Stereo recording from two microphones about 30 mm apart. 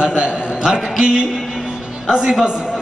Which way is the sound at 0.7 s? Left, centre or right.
Right.